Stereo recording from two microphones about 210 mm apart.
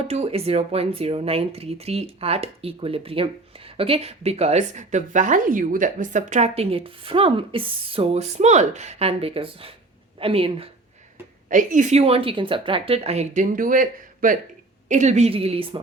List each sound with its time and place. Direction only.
0.0 s speech: 30° right (ahead or behind)
11.4 s a woman's voice: 40° right (ahead or behind)